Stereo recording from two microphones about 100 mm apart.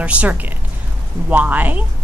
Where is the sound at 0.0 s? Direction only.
15° right (ahead or behind).